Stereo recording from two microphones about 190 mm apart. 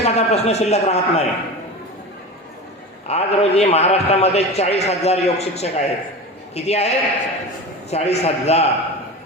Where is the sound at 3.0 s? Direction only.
35° left (ahead or behind).